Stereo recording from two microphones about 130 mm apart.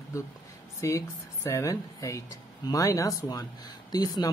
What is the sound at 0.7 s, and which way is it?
Speech, 25° left (ahead or behind).